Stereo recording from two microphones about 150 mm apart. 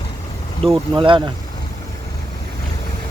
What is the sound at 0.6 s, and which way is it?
Speech, 40° right (ahead or behind).